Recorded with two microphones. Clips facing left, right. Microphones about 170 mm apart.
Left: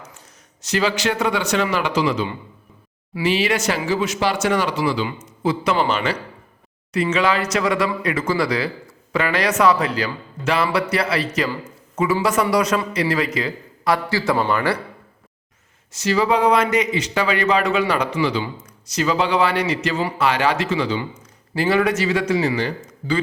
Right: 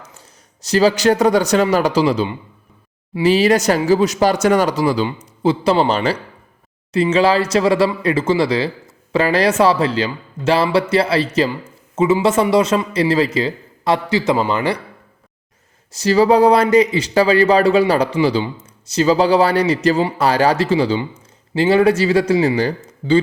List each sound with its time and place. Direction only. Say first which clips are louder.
0.6 s a man's voice: right 7 dB; 35° right (ahead or behind); by 14.8 s 20° right (ahead or behind)
15.9 s a man's voice: right 6 dB; 35° right (ahead or behind)